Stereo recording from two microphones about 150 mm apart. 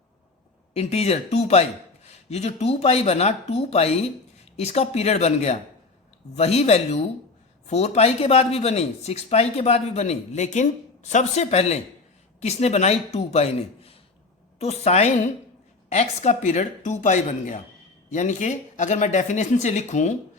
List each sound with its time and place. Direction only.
0.7 s speech: 45° left (ahead or behind)